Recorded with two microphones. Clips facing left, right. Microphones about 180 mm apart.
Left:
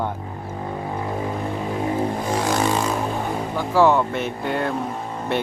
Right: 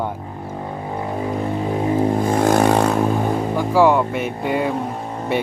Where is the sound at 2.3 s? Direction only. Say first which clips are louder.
Right 6 dB; 55° right (ahead or behind).